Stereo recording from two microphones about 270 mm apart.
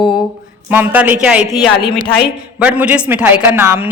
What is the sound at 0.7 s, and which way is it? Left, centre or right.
Speech, centre.